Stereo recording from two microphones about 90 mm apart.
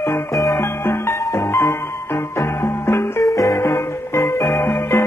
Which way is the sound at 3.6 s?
25° left (ahead or behind).